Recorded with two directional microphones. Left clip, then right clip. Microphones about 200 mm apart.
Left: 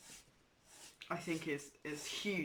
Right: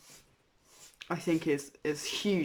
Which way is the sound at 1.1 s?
35° right (ahead or behind).